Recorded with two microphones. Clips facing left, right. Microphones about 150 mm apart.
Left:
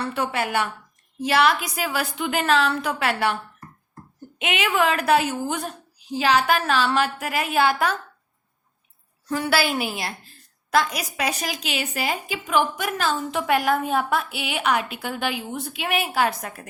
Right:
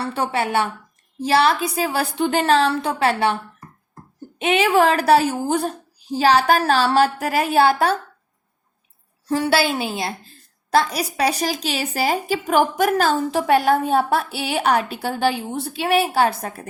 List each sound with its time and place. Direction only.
0.0 s a woman's voice: 30° right (ahead or behind)
4.4 s a woman's voice: 35° right (ahead or behind)
9.3 s a woman's voice: 25° right (ahead or behind)